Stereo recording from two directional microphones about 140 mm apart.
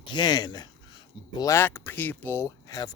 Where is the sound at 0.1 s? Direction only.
30° left (ahead or behind).